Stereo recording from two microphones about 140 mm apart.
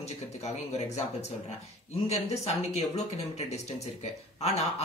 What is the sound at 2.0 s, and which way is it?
Speech, 50° left (ahead or behind).